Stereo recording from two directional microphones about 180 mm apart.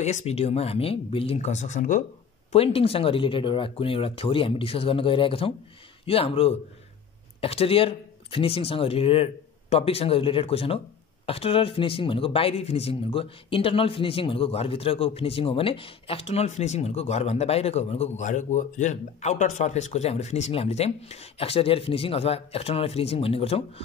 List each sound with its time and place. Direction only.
0.0 s speech: 40° left (ahead or behind)
2.5 s speech: 35° left (ahead or behind)